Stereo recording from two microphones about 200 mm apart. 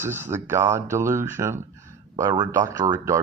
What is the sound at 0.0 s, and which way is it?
Speech, 10° right (ahead or behind).